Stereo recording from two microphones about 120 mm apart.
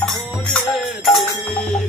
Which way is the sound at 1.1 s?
Centre (ahead or behind).